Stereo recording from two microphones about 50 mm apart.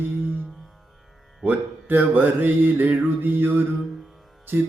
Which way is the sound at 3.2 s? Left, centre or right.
Right.